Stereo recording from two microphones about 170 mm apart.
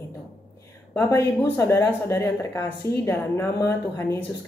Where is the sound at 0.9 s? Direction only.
20° left (ahead or behind).